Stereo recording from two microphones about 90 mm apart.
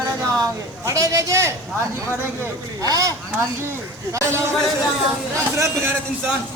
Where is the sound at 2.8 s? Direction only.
40° right (ahead or behind).